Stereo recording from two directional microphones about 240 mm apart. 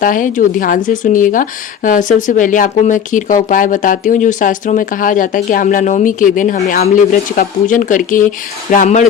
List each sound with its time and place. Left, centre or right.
0.0 s speech: left